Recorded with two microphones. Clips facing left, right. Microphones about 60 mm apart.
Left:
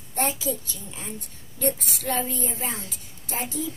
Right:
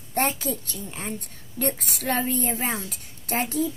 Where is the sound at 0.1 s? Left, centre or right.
Right.